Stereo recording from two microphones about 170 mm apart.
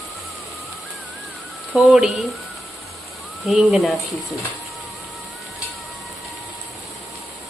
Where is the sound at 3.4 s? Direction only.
Centre (ahead or behind).